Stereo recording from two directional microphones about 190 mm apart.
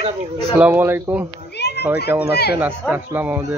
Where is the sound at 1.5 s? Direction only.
60° left (ahead or behind).